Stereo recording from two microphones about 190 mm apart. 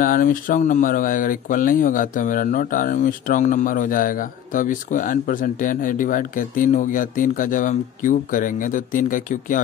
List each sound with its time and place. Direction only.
0.0 s speech: 45° left (ahead or behind)